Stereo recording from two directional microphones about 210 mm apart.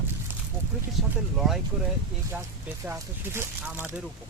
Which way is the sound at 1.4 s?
Centre (ahead or behind).